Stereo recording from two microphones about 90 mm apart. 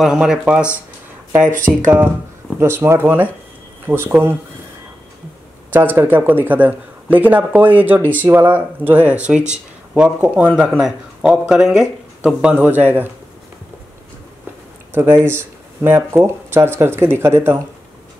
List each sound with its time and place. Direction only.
0.0 s speech: 5° right (ahead or behind)
1.7 s speech: 5° right (ahead or behind)
2.6 s speech: 30° right (ahead or behind)
5.7 s speech: 20° right (ahead or behind)
14.9 s speech: 25° right (ahead or behind)